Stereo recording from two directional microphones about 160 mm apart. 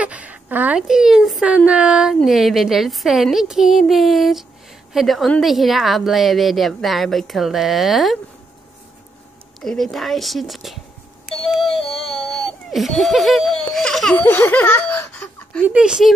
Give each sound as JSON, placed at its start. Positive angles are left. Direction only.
{"t": 0.0, "sound": "a sound", "side_deg": -10}
{"t": 1.7, "sound": "a woman's voice", "side_deg": -5}
{"t": 9.6, "sound": "a woman's voice", "side_deg": 5}
{"t": 12.2, "sound": "speech", "side_deg": 0}
{"t": 15.6, "sound": "a woman's voice", "side_deg": -5}